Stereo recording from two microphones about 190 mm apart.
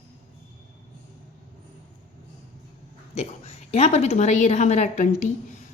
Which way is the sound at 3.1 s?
35° left (ahead or behind).